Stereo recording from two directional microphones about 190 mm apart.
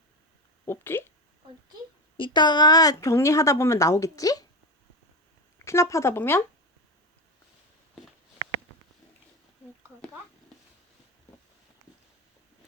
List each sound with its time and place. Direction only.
0.6 s speech: 10° left (ahead or behind)
2.1 s a woman's voice: 25° left (ahead or behind)
5.6 s a woman's voice: 15° left (ahead or behind)